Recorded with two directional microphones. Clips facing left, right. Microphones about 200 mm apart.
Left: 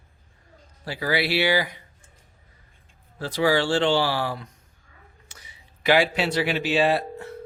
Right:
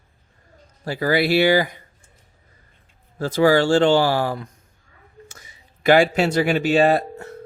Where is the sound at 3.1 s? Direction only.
45° right (ahead or behind).